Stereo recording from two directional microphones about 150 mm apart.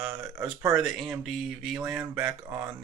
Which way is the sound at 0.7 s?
Centre (ahead or behind).